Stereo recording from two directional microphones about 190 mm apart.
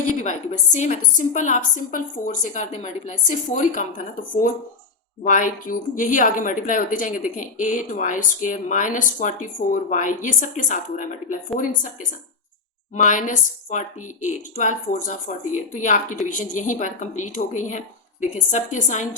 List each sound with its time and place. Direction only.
0.1 s a woman's voice: 40° left (ahead or behind)
13.0 s a woman's voice: 40° left (ahead or behind)